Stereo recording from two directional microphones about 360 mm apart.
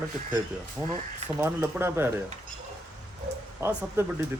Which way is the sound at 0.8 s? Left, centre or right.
Centre.